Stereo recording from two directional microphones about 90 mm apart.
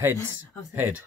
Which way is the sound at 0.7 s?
15° right (ahead or behind).